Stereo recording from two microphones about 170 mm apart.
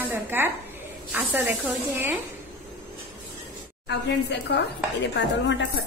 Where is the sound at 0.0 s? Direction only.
10° right (ahead or behind).